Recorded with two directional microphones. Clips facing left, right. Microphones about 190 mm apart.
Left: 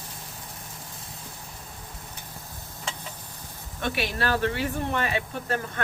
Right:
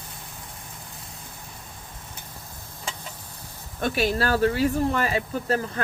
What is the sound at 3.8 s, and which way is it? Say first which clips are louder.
Speech: right 4 dB; 40° right (ahead or behind).